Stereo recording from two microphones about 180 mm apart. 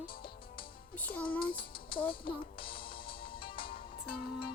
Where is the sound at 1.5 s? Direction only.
55° left (ahead or behind).